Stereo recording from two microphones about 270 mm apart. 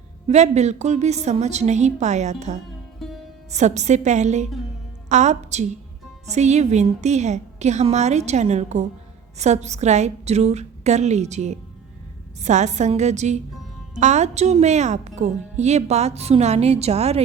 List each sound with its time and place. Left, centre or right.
0.3 s speech: right
3.0 s music: centre
3.5 s a woman's voice: right